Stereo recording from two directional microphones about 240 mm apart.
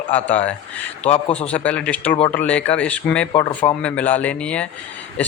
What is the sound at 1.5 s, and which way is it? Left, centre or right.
Speech, centre.